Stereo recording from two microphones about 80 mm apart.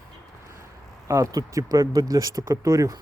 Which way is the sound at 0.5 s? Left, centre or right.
Right.